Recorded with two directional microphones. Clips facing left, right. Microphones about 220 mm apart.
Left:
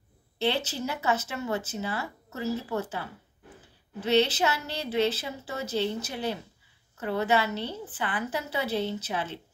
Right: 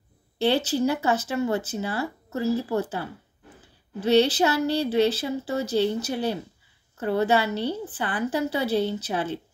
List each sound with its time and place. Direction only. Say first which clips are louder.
0.4 s speech: right 7 dB; 35° right (ahead or behind)
4.0 s speech: right 4 dB; 35° right (ahead or behind)